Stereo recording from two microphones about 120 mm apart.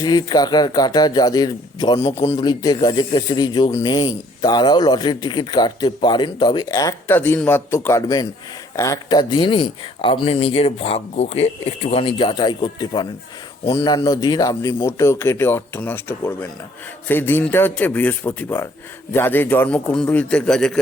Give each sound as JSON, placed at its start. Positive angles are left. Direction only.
{"t": 0.0, "sound": "a man's voice", "side_deg": 35}
{"t": 7.1, "sound": "a man's voice", "side_deg": 15}
{"t": 8.0, "sound": "a man's voice", "side_deg": 30}